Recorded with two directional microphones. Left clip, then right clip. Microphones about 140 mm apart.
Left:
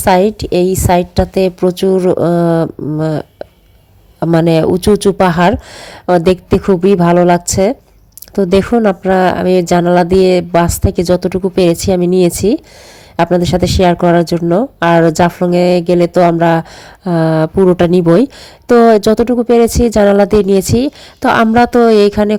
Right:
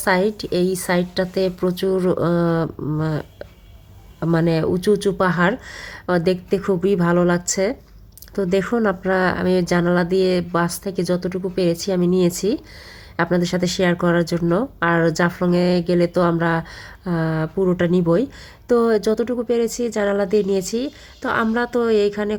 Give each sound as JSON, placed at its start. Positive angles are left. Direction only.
{"t": 0.0, "sound": "a woman's voice", "side_deg": 35}